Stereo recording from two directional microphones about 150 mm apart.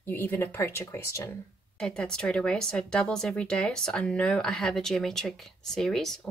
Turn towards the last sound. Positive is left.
turn(degrees=5)  # may be behind; listen again after turning